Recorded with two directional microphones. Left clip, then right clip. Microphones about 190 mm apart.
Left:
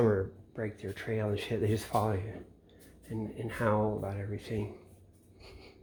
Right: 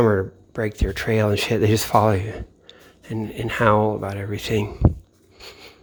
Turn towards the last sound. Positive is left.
turn(degrees=-40)  # may be behind; listen again after turning